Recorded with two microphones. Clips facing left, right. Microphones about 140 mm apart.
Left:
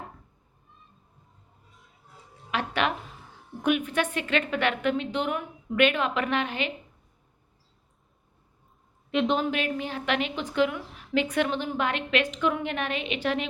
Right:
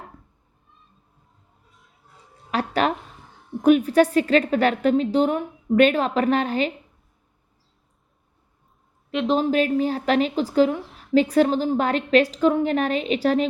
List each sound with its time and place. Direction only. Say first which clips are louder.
1.7 s a sound: left 1 dB; centre (ahead or behind)
2.5 s a woman's voice: right 5 dB; 40° right (ahead or behind)
9.0 s a woman's voice: right 3 dB; centre (ahead or behind)
9.4 s a woman's voice: right 8 dB; 40° right (ahead or behind)